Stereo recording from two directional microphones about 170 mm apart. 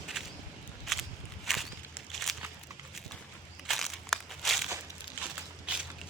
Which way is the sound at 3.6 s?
Centre (ahead or behind).